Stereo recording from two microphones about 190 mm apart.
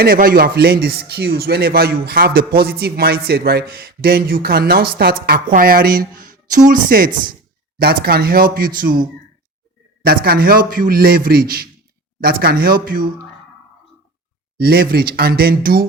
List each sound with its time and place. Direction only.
0.0 s a man's voice: 50° right (ahead or behind)
14.6 s a man's voice: 55° right (ahead or behind)